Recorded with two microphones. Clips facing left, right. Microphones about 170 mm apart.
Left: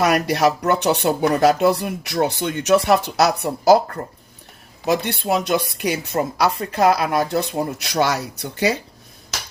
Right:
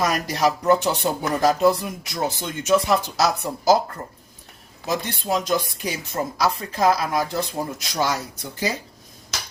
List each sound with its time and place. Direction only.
0.0 s speech: 65° left (ahead or behind)
4.9 s speech: 65° left (ahead or behind)